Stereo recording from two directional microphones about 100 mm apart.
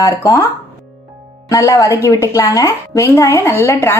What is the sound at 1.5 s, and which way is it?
A woman's voice, 35° left (ahead or behind).